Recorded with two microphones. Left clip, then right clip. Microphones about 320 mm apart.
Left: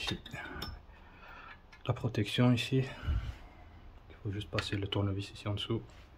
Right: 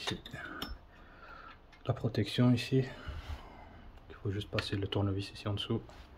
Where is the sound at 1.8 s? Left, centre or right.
Centre.